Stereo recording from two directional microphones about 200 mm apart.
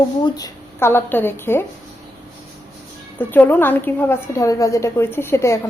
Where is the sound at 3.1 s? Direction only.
10° left (ahead or behind).